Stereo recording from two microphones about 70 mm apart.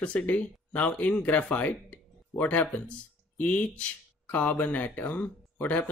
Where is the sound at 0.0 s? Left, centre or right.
Centre.